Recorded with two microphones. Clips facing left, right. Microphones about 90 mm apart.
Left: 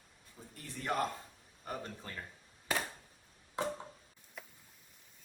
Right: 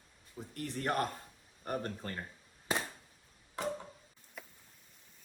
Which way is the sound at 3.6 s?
20° left (ahead or behind).